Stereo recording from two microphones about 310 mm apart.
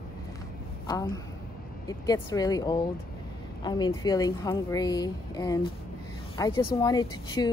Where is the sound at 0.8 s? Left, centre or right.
Centre.